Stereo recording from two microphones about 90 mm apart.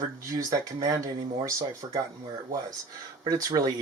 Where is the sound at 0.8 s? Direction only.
40° right (ahead or behind).